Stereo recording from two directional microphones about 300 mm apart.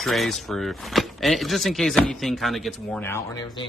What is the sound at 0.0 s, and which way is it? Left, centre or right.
Speech, centre.